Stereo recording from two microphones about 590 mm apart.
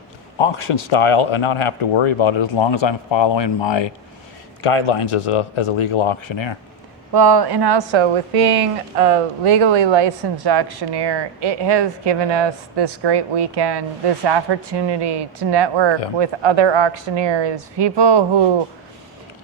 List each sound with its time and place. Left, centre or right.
0.3 s speech: left
4.6 s speech: left
7.1 s a woman's voice: right